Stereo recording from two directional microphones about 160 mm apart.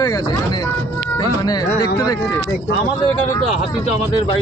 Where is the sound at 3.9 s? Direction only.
30° left (ahead or behind).